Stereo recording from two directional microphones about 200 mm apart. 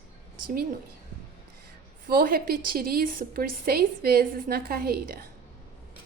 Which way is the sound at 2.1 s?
45° right (ahead or behind).